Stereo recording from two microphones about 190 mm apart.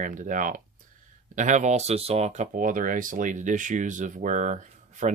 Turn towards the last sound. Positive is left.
turn(degrees=-40)  # may be behind; listen again after turning